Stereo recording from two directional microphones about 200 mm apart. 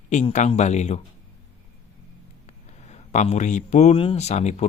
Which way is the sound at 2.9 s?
35° left (ahead or behind).